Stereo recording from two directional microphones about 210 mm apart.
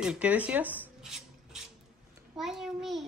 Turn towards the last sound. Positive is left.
turn(degrees=0)  # may be behind; listen again after turning